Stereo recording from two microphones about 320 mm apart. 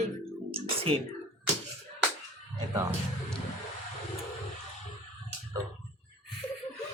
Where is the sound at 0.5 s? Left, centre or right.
Centre.